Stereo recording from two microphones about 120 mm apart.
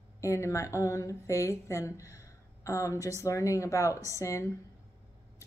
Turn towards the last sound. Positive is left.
turn(degrees=25)  # may be behind; listen again after turning